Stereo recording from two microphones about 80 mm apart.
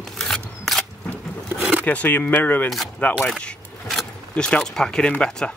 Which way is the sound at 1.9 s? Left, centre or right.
Centre.